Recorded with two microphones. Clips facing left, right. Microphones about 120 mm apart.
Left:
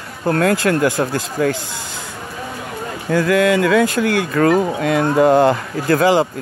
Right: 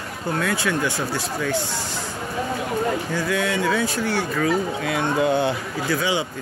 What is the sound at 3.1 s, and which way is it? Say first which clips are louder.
Speech: left 9 dB; 75° left (ahead or behind).